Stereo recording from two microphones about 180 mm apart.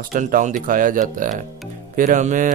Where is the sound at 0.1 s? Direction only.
45° right (ahead or behind).